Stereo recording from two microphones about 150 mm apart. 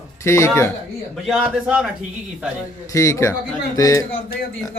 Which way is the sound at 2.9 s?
20° left (ahead or behind).